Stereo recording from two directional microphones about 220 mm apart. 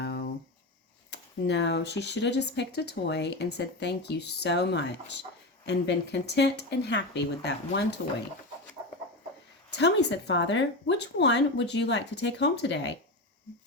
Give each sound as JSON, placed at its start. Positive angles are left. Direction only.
{"t": 0.0, "sound": "a sound", "side_deg": 50}
{"t": 1.1, "sound": "speech", "side_deg": 50}
{"t": 9.6, "sound": "speech", "side_deg": 50}